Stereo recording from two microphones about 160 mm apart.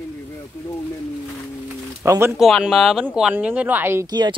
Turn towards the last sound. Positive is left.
turn(degrees=-30)  # may be behind; listen again after turning